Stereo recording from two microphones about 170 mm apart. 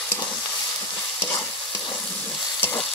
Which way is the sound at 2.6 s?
10° left (ahead or behind).